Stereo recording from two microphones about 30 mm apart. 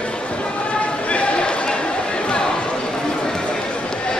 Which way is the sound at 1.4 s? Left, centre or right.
Left.